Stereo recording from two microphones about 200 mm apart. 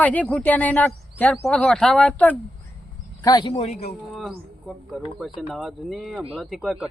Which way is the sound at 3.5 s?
30° left (ahead or behind).